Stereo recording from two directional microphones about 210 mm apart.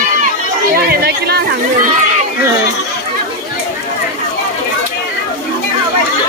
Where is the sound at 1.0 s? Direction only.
50° right (ahead or behind).